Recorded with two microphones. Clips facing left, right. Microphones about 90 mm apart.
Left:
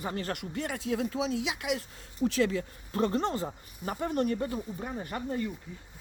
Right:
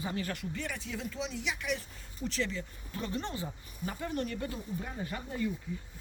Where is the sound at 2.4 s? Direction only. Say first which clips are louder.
Left 8 dB; 50° left (ahead or behind).